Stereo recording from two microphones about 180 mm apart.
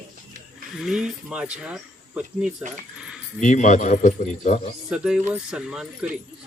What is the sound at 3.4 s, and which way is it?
Speech, 40° left (ahead or behind).